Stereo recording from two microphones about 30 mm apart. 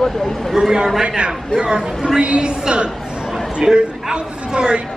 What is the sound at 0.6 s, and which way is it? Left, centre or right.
Speech, right.